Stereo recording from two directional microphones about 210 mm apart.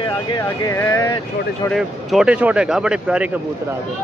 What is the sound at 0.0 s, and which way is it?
Speech, 20° left (ahead or behind).